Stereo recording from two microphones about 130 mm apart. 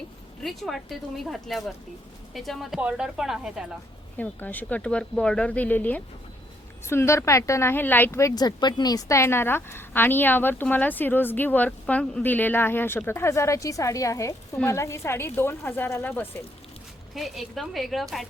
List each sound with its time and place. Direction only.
0.4 s a woman's voice: centre (ahead or behind)
4.2 s a woman's voice: 15° left (ahead or behind)
17.2 s a woman's voice: centre (ahead or behind)